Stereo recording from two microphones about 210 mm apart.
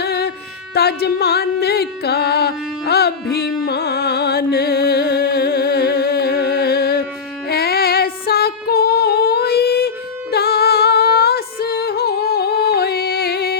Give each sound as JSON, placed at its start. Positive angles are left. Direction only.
{"t": 0.0, "sound": "music", "side_deg": 50}